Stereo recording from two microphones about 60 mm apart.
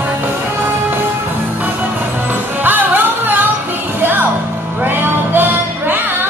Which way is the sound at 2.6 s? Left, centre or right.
Right.